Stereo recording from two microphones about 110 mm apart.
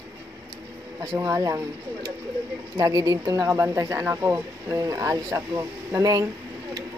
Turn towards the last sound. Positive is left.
turn(degrees=-30)  # may be behind; listen again after turning